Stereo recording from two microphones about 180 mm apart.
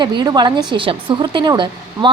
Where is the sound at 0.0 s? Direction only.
25° right (ahead or behind).